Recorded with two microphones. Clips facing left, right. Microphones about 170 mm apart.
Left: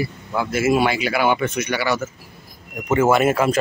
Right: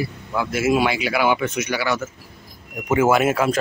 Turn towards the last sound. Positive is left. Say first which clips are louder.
# left 1 dB
turn(degrees=0)  # may be behind; listen again after turning